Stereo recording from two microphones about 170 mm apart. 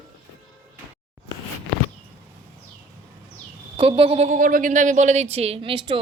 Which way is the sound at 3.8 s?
35° right (ahead or behind).